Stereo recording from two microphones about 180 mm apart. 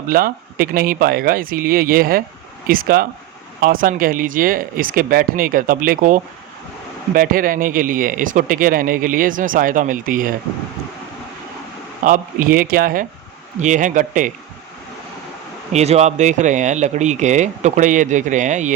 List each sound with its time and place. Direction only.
0.1 s speech: 55° right (ahead or behind)
12.0 s speech: 50° right (ahead or behind)
15.7 s speech: 35° right (ahead or behind)